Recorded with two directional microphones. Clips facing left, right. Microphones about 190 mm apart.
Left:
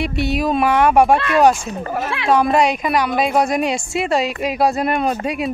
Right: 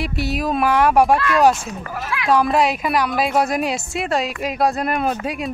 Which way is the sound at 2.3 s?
Centre (ahead or behind).